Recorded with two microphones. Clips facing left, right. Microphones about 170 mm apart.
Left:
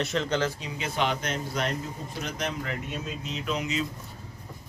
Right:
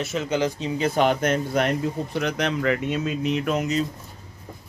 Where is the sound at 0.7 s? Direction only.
45° right (ahead or behind).